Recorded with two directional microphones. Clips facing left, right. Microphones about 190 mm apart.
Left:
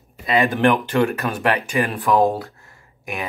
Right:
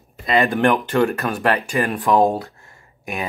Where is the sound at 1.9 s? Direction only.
20° right (ahead or behind).